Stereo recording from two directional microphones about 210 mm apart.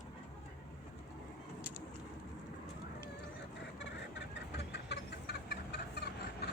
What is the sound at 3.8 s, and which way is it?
Chicken, 55° left (ahead or behind).